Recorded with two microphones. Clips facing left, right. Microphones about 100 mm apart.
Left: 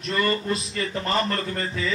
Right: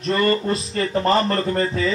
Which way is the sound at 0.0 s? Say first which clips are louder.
Right 5 dB; 40° right (ahead or behind).